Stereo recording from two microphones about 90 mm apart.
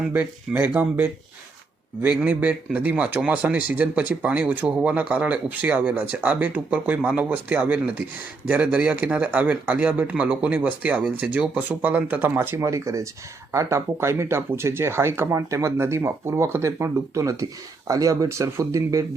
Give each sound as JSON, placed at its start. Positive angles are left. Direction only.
{"t": 0.1, "sound": "speech", "side_deg": -25}